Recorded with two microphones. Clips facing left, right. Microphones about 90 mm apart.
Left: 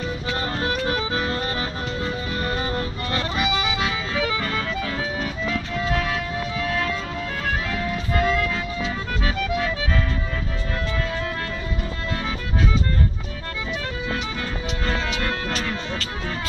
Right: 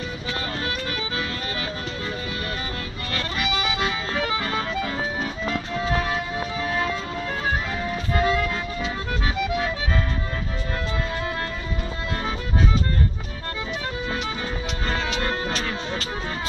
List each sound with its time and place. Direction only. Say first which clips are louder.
0.7 s music: left 5 dB; 35° left (ahead or behind)
3.1 s music: left 2 dB; 20° left (ahead or behind)
3.7 s music: even; centre (ahead or behind)
4.4 s music: even; 10° right (ahead or behind)